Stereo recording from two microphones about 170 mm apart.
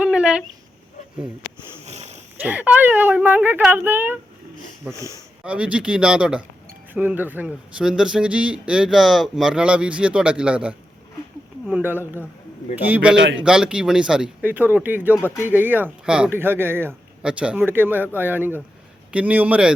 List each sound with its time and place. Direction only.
0.0 s a sound: 5° right (ahead or behind)
1.9 s a sound: 40° right (ahead or behind)
2.4 s a man's voice: 10° right (ahead or behind)
4.9 s speech: 20° left (ahead or behind)
5.4 s a man's voice: 5° right (ahead or behind)
13.1 s a man's voice: 90° right
13.4 s a man's voice: 5° right (ahead or behind)
15.1 s speech: 15° left (ahead or behind)
15.4 s a man's voice: 10° right (ahead or behind)